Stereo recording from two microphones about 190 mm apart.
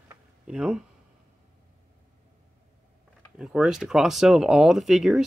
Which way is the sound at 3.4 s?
5° right (ahead or behind).